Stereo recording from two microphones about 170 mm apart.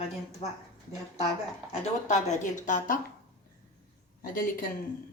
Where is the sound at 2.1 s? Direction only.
45° left (ahead or behind).